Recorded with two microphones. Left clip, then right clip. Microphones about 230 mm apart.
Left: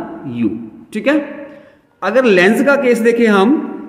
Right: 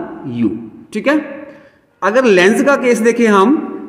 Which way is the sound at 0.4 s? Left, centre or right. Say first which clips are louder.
Right 1 dB; centre.